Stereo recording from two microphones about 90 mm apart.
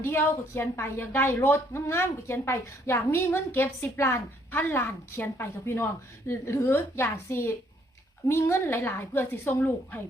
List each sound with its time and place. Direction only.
0.0 s speech: 25° left (ahead or behind)